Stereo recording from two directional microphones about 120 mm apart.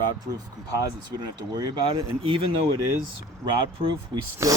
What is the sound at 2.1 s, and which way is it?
Speech, 50° right (ahead or behind).